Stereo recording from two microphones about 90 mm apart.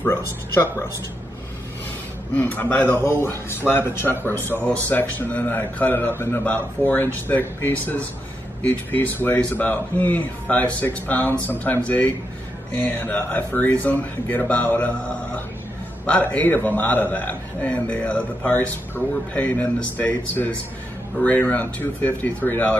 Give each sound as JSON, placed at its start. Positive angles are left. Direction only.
{"t": 0.0, "sound": "speech", "side_deg": 30}
{"t": 2.3, "sound": "a man's voice", "side_deg": 20}